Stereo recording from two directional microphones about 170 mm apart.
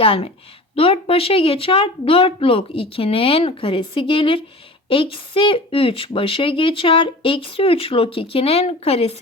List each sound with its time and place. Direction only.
0.0 s a woman's voice: 35° left (ahead or behind)